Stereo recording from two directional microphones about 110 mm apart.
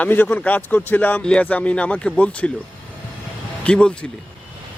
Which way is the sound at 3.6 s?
10° left (ahead or behind).